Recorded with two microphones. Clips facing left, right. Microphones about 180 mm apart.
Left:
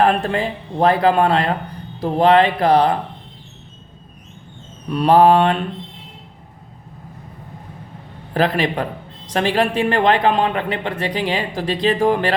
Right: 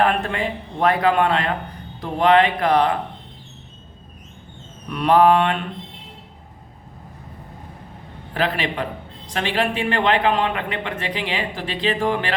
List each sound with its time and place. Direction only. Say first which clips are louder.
0.0 s a man's voice: left 3 dB; 35° left (ahead or behind)
4.9 s a man's voice: left 3 dB; 35° left (ahead or behind)
8.3 s a man's voice: left 5 dB; 40° left (ahead or behind)